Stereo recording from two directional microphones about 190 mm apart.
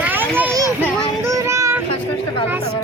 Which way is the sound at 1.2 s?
15° right (ahead or behind).